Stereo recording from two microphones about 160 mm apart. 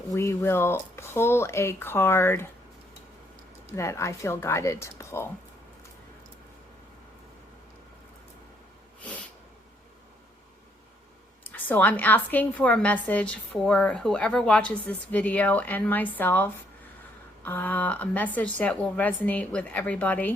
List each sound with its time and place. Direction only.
0.1 s a woman's voice: 20° left (ahead or behind)
3.8 s a woman's voice: 15° left (ahead or behind)
11.4 s a woman's voice: 10° left (ahead or behind)